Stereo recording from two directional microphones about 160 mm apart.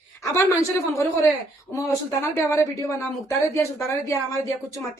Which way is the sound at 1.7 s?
20° left (ahead or behind).